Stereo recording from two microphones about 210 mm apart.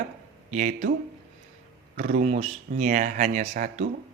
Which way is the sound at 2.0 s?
35° right (ahead or behind).